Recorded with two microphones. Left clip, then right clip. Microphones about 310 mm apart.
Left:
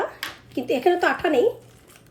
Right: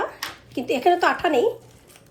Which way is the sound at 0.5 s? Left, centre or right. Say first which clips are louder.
Right 1 dB; right.